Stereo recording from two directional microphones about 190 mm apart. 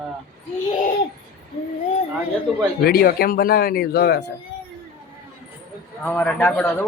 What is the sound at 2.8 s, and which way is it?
Speech, 55° left (ahead or behind).